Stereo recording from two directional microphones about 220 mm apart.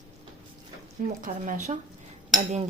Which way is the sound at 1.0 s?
35° right (ahead or behind).